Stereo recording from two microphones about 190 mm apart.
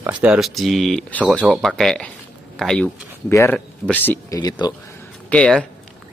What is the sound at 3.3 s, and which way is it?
Speech, 10° left (ahead or behind).